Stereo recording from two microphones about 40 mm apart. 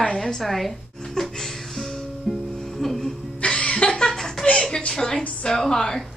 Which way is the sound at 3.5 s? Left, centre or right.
Left.